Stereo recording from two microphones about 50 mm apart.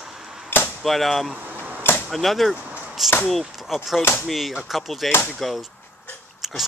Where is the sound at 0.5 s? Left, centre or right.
Left.